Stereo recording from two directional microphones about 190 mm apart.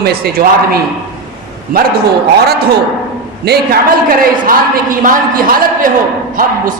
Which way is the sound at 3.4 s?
55° right (ahead or behind).